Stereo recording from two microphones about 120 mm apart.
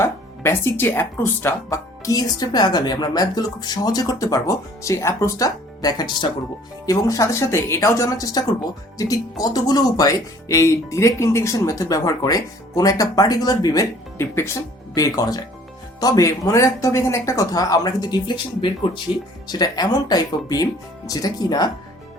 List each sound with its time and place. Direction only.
0.0 s speech: 20° left (ahead or behind)